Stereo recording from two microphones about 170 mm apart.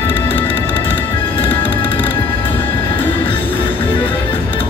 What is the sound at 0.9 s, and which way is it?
Music, 10° left (ahead or behind).